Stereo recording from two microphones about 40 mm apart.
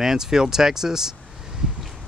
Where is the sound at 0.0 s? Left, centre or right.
Centre.